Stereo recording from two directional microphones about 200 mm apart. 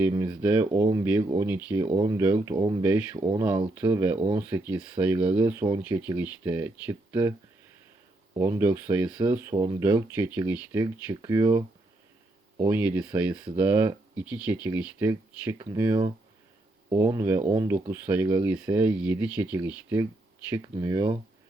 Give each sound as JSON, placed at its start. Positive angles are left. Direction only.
{"t": 0.3, "sound": "speech", "side_deg": -10}
{"t": 8.4, "sound": "speech", "side_deg": -15}
{"t": 12.7, "sound": "speech", "side_deg": -10}